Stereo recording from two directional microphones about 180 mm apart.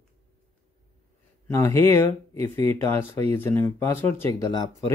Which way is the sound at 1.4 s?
15° left (ahead or behind).